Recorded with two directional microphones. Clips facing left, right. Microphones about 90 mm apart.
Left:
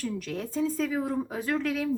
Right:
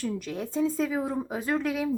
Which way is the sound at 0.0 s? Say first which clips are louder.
Right 1 dB; 10° right (ahead or behind).